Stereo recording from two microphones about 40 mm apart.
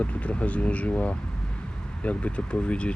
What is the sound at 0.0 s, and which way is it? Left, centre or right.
Speech, left.